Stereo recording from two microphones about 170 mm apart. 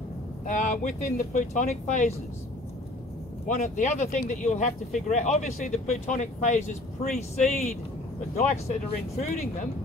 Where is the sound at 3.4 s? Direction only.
45° left (ahead or behind).